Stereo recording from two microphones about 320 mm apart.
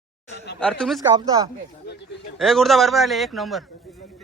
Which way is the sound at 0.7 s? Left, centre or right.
Centre.